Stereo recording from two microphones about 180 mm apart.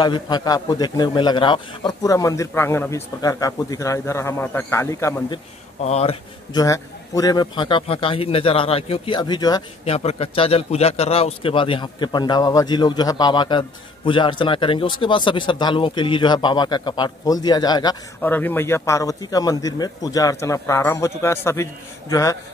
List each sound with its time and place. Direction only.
0.0 s a man's voice: 25° left (ahead or behind)
5.8 s speech: 35° left (ahead or behind)
6.5 s a man's voice: 20° left (ahead or behind)
9.8 s a man's voice: 35° left (ahead or behind)
18.2 s a man's voice: 10° left (ahead or behind)